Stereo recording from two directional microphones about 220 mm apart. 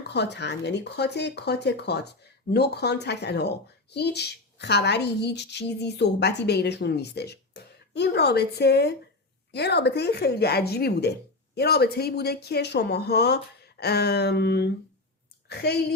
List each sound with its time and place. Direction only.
0.1 s a child's voice: 50° left (ahead or behind)